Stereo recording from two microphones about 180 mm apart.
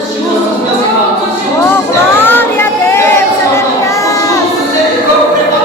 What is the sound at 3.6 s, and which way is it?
Crowd, 15° left (ahead or behind).